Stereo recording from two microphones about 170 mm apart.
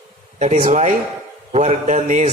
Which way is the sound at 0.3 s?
45° right (ahead or behind).